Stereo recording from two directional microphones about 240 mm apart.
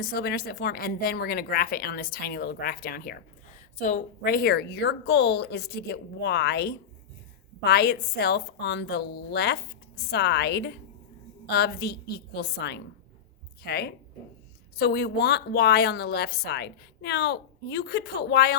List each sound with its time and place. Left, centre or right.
0.0 s a woman's voice: left